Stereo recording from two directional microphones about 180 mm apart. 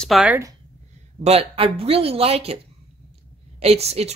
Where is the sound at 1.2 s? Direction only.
35° right (ahead or behind).